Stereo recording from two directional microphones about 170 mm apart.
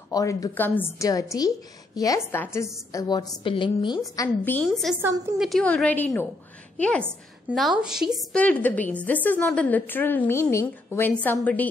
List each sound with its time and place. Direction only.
0.1 s a woman's voice: 20° left (ahead or behind)
4.6 s a woman's voice: centre (ahead or behind)